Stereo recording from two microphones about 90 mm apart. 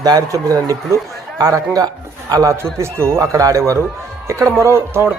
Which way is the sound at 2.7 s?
30° right (ahead or behind).